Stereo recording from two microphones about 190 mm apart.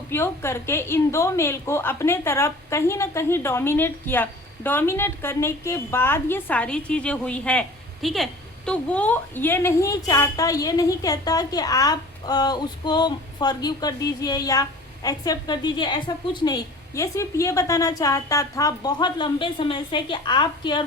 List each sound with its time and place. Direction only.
0.1 s a woman's voice: 15° left (ahead or behind)